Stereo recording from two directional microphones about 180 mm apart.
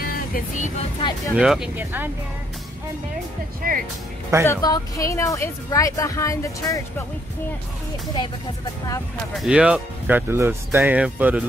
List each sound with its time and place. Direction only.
0.0 s vehicle: 50° left (ahead or behind)
1.3 s speech: 5° right (ahead or behind)
3.6 s speech: 50° right (ahead or behind)
4.5 s a woman's voice: 20° left (ahead or behind)
9.4 s speech: 5° right (ahead or behind)